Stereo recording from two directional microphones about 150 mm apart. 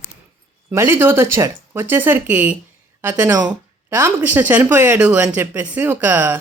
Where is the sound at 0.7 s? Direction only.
15° right (ahead or behind).